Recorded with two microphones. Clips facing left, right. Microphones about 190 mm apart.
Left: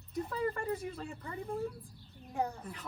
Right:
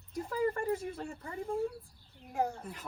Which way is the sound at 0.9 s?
30° right (ahead or behind).